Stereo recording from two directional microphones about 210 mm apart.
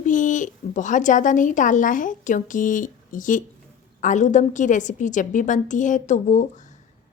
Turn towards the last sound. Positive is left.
turn(degrees=35)  # may be behind; listen again after turning